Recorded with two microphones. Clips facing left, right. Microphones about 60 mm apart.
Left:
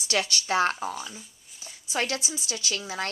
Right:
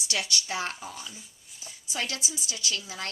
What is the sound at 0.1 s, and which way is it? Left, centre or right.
Speech, left.